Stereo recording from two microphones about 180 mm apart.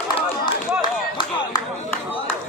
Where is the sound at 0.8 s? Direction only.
25° left (ahead or behind).